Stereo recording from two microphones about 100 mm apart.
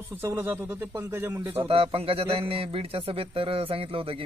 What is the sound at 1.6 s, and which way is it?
A man's voice, 75° right (ahead or behind).